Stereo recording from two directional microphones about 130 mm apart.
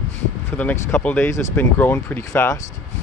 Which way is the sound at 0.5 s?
15° left (ahead or behind).